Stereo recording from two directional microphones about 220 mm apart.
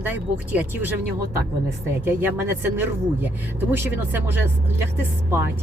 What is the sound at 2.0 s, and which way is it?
Speech, 10° right (ahead or behind).